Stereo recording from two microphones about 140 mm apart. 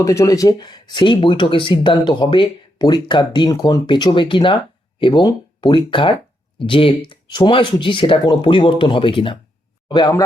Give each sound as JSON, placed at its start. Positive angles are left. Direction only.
{"t": 0.0, "sound": "speech", "side_deg": 20}
{"t": 9.9, "sound": "speech", "side_deg": 25}